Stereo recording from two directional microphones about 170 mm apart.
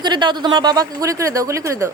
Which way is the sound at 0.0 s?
25° right (ahead or behind).